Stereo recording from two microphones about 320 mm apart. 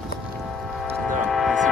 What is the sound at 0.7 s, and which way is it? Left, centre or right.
Vehicle, centre.